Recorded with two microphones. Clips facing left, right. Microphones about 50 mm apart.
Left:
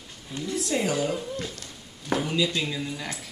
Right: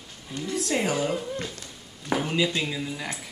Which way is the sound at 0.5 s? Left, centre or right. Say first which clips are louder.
Even; right.